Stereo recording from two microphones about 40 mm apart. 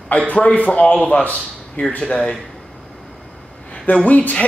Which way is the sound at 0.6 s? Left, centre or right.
Left.